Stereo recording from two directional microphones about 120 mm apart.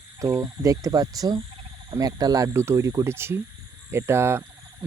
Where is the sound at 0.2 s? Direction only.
30° right (ahead or behind).